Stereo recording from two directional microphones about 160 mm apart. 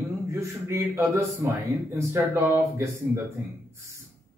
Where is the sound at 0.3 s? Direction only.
15° right (ahead or behind).